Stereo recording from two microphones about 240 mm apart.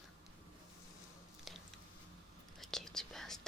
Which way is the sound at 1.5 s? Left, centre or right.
Centre.